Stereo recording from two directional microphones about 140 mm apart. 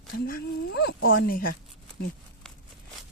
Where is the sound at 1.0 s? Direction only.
90° left.